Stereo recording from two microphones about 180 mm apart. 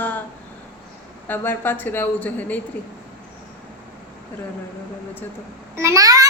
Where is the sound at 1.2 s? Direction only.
10° left (ahead or behind).